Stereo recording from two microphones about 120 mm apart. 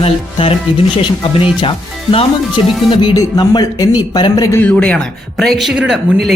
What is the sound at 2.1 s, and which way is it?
Speech, 45° left (ahead or behind).